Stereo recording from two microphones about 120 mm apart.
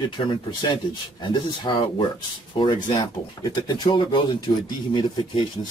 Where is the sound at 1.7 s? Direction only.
40° left (ahead or behind).